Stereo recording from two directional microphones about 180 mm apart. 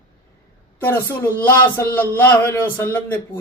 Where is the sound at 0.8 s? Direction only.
10° left (ahead or behind).